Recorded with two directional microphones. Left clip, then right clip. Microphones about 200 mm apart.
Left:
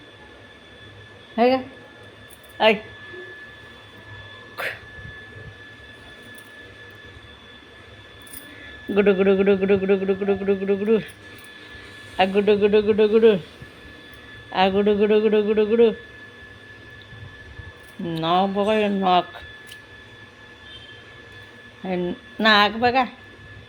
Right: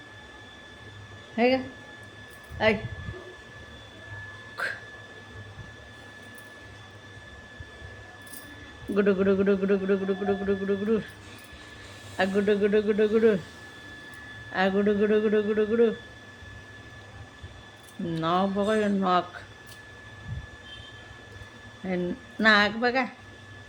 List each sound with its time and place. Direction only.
1.4 s a man's voice: 5° left (ahead or behind)
4.6 s a sound: 5° left (ahead or behind)
9.0 s speech: 5° left (ahead or behind)
12.1 s a man's voice: 5° left (ahead or behind)
14.5 s a man's voice: 5° left (ahead or behind)
18.1 s a man's voice: centre (ahead or behind)
21.8 s a man's voice: centre (ahead or behind)